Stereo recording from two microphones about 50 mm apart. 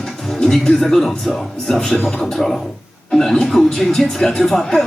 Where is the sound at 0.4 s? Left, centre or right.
Centre.